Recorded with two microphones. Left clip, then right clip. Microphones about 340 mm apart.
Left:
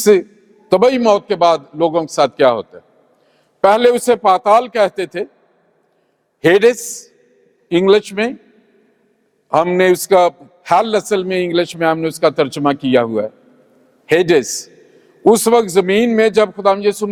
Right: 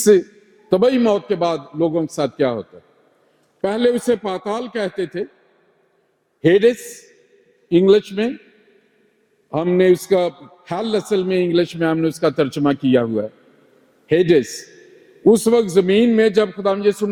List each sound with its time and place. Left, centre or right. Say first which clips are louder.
0.0 s a man's voice: left 2 dB; left
3.6 s a man's voice: left 7 dB; left
6.4 s a man's voice: left 3 dB; left
9.5 s a man's voice: left 3 dB; left
14.1 s a man's voice: left 3 dB; left